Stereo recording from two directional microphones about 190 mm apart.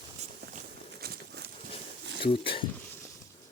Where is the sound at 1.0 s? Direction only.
55° right (ahead or behind).